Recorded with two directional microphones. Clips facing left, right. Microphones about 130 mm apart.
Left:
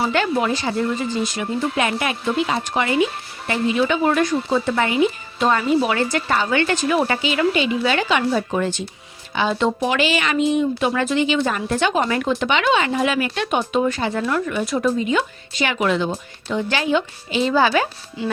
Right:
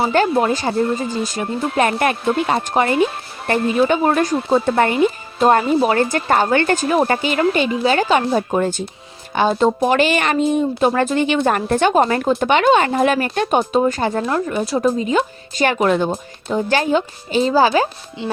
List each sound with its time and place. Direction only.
0.1 s speech: 45° right (ahead or behind)